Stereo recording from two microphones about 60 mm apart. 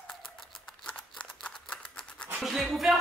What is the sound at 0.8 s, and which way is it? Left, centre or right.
Scissors, left.